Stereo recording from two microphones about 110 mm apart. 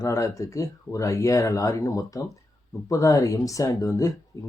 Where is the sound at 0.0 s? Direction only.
30° left (ahead or behind).